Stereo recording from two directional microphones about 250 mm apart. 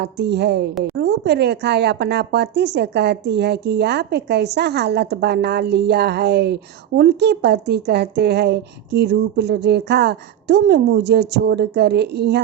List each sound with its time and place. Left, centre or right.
0.0 s a woman's voice: right